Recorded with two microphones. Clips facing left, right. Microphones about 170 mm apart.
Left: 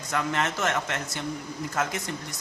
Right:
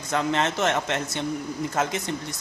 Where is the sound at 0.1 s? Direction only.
25° right (ahead or behind).